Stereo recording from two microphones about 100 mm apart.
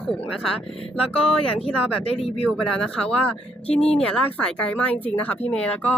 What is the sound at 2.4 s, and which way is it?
Speech, 5° left (ahead or behind).